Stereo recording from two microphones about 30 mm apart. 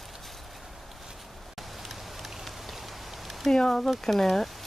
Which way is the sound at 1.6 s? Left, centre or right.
Centre.